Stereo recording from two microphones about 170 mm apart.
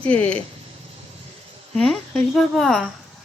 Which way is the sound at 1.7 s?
5° left (ahead or behind).